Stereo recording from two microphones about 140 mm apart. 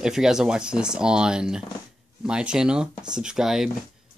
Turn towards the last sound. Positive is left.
turn(degrees=-5)  # may be behind; listen again after turning